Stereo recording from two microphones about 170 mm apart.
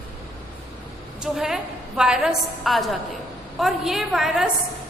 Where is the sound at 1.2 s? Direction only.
5° right (ahead or behind).